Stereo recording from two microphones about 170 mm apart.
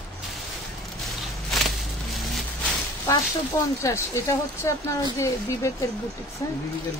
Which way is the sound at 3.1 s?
20° left (ahead or behind).